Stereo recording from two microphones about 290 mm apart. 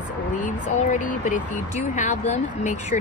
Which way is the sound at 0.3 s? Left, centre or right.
Left.